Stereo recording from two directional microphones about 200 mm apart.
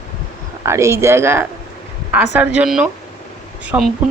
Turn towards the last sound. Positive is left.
turn(degrees=-5)  # may be behind; listen again after turning